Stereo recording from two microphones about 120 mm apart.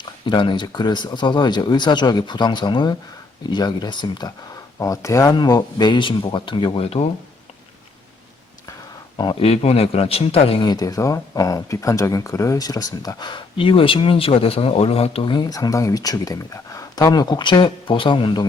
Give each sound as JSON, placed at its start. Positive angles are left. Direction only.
{"t": 0.3, "sound": "speech", "side_deg": 40}
{"t": 4.8, "sound": "speech", "side_deg": 25}
{"t": 6.7, "sound": "a man's voice", "side_deg": 55}
{"t": 9.1, "sound": "speech", "side_deg": 45}
{"t": 9.5, "sound": "a man's voice", "side_deg": 60}
{"t": 10.6, "sound": "speech", "side_deg": 35}